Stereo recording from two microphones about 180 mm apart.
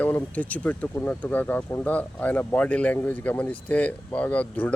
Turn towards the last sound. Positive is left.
turn(degrees=5)  # may be behind; listen again after turning